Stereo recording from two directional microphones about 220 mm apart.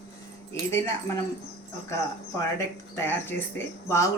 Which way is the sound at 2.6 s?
10° left (ahead or behind).